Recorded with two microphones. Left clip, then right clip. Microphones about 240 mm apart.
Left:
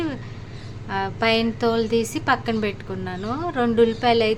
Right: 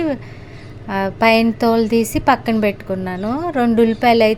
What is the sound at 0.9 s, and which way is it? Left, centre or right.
A woman's voice, right.